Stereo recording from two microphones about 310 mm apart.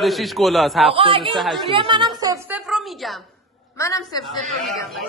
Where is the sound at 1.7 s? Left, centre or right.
Centre.